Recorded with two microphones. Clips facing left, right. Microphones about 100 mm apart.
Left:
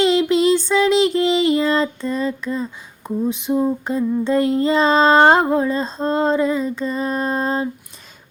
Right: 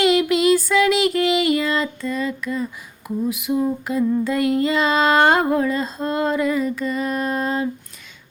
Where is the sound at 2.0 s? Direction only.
35° left (ahead or behind).